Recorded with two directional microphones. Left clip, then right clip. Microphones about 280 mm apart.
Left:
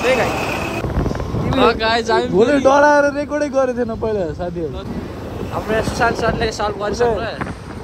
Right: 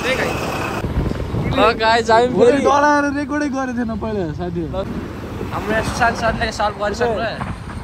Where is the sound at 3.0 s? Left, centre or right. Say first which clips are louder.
Left 2 dB; right.